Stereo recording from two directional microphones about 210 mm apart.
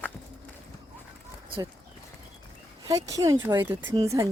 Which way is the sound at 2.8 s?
15° right (ahead or behind).